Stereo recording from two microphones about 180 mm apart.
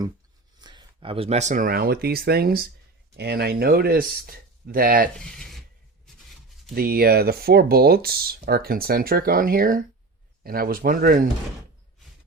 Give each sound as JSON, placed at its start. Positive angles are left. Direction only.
{"t": 0.6, "sound": "speech", "side_deg": -25}
{"t": 5.2, "sound": "speech", "side_deg": 5}
{"t": 6.7, "sound": "speech", "side_deg": -55}